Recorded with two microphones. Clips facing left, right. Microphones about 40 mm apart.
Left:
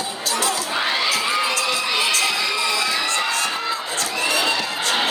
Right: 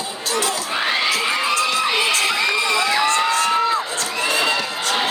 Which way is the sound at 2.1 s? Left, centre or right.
Right.